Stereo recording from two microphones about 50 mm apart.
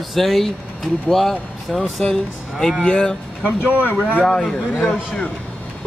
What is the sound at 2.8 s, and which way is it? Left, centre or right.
Speech, centre.